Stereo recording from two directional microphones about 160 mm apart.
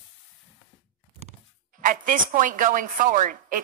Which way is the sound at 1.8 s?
55° right (ahead or behind).